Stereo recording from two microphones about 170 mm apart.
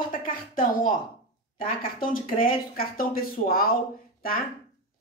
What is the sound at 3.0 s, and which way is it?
Speech, 60° left (ahead or behind).